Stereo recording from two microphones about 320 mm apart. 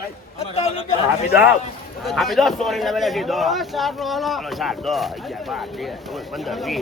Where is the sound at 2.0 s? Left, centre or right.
Centre.